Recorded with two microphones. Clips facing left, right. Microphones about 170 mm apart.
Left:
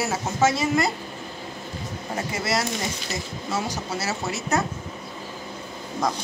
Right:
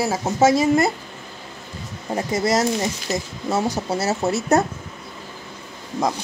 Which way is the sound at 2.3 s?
40° right (ahead or behind).